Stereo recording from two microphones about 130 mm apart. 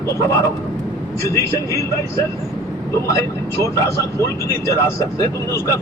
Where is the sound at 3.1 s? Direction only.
25° left (ahead or behind).